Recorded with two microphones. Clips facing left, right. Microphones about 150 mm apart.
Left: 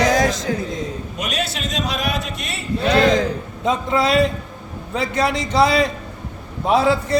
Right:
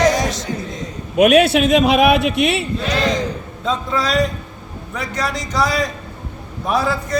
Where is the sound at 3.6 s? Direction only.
20° left (ahead or behind).